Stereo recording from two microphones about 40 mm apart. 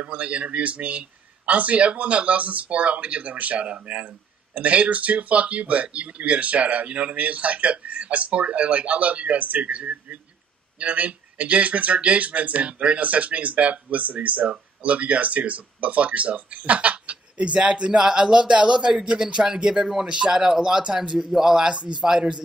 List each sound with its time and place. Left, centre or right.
0.0 s speech: right